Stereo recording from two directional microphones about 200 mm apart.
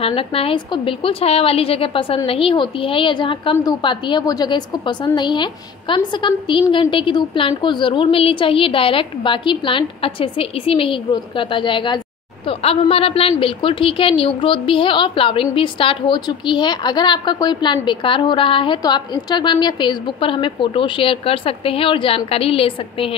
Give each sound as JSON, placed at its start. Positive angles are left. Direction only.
{"t": 0.0, "sound": "a woman's voice", "side_deg": 25}